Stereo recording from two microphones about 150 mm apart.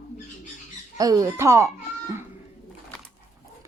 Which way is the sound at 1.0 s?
25° right (ahead or behind).